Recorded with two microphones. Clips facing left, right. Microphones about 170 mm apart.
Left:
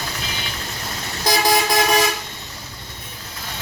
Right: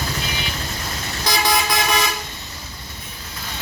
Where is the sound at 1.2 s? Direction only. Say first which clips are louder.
Left 3 dB; 45° left (ahead or behind).